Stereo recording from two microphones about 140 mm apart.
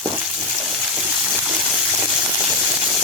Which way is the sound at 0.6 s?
Centre (ahead or behind).